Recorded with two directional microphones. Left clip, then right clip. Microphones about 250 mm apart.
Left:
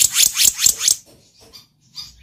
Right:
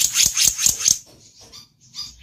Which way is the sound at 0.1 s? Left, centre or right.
Centre.